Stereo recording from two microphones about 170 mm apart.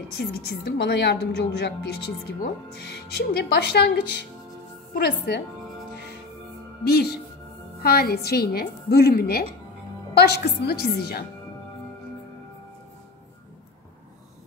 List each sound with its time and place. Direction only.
0.1 s a woman's voice: 70° left (ahead or behind)
6.8 s a woman's voice: 70° left (ahead or behind)